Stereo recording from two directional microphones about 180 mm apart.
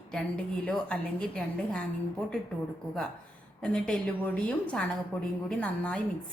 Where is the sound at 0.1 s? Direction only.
5° left (ahead or behind).